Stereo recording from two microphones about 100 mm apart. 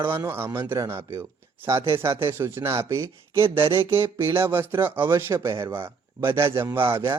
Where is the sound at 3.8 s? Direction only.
25° right (ahead or behind).